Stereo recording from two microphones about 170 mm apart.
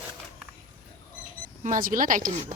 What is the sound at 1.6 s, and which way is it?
Speech, 50° right (ahead or behind).